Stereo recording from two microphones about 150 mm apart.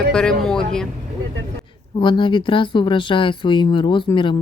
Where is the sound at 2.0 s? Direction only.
30° left (ahead or behind).